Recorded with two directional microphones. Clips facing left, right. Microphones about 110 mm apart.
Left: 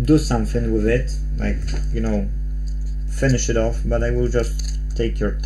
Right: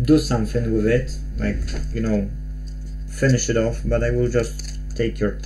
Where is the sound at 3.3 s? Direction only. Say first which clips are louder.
Even; 20° left (ahead or behind).